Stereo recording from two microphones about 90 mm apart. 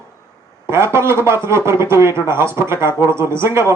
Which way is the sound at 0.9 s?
30° right (ahead or behind).